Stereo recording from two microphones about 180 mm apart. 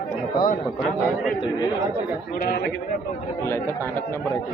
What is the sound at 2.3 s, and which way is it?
Speech, 60° left (ahead or behind).